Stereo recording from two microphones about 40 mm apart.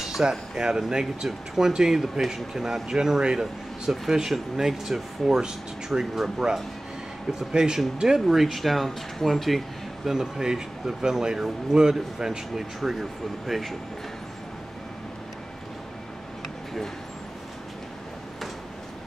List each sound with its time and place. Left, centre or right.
0.2 s speech: centre
7.3 s speech: centre
10.0 s speech: centre
13.5 s speech: centre